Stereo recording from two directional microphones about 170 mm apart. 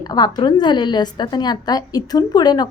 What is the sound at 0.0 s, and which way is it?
A woman's voice, 25° left (ahead or behind).